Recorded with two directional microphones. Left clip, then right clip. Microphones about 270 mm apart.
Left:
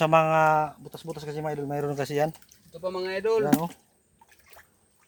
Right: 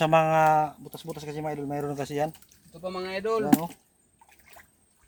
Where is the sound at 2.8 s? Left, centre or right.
Centre.